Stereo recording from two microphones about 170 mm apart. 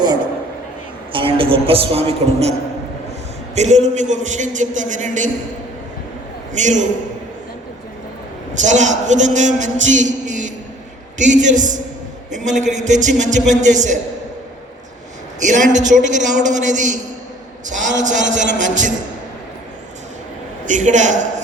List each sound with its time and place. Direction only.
1.1 s a man's voice: 30° right (ahead or behind); by 5.3 s 45° right (ahead or behind)
6.5 s a man's voice: 45° right (ahead or behind)
8.6 s a man's voice: 45° right (ahead or behind)
15.4 s a man's voice: 45° right (ahead or behind)
20.7 s a man's voice: 45° right (ahead or behind)